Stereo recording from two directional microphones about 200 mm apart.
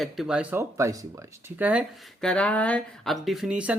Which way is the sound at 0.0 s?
Centre (ahead or behind).